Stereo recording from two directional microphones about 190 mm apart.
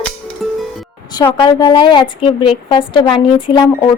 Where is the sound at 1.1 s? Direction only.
25° left (ahead or behind).